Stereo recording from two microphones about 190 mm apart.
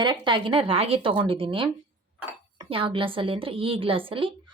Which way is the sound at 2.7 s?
30° right (ahead or behind).